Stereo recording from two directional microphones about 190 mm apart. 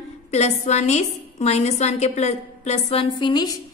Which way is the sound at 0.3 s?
35° left (ahead or behind).